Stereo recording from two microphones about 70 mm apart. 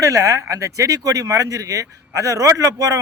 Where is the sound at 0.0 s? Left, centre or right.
Right.